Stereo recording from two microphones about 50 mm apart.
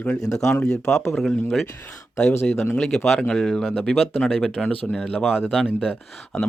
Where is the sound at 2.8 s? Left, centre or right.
Centre.